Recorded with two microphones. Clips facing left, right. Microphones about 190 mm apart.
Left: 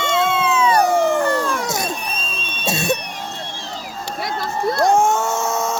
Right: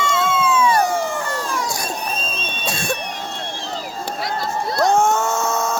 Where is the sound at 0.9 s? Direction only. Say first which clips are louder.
Left 6 dB; 60° left (ahead or behind).